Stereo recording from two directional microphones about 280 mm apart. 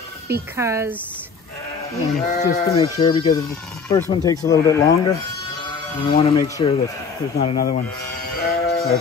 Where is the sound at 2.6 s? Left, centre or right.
Centre.